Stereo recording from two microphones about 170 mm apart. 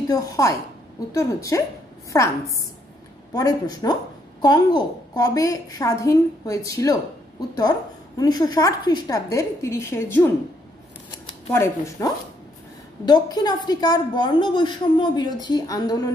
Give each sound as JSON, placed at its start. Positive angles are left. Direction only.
{"t": 0.1, "sound": "a woman's voice", "side_deg": 20}
{"t": 3.3, "sound": "a woman's voice", "side_deg": 20}
{"t": 8.2, "sound": "a woman's voice", "side_deg": 25}
{"t": 11.5, "sound": "a woman's voice", "side_deg": 15}